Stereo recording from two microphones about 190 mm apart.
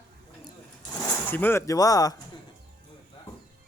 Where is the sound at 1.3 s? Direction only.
10° left (ahead or behind).